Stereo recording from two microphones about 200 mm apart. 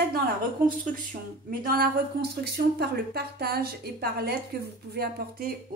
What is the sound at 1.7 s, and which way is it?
Speech, 50° right (ahead or behind).